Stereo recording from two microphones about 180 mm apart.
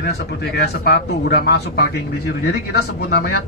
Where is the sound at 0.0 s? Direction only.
65° left (ahead or behind).